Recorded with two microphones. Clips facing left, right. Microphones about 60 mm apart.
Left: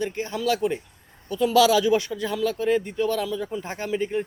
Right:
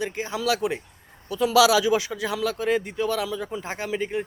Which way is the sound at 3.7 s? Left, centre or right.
Centre.